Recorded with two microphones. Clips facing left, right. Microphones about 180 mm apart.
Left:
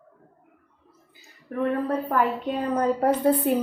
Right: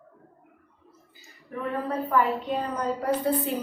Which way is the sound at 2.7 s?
55° left (ahead or behind).